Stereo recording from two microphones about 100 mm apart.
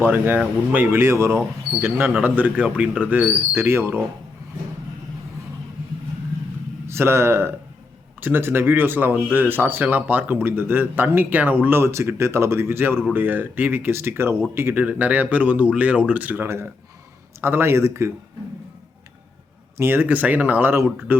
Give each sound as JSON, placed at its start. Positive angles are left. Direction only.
{"t": 0.0, "sound": "speech", "side_deg": -20}
{"t": 6.8, "sound": "speech", "side_deg": -25}
{"t": 19.7, "sound": "speech", "side_deg": -20}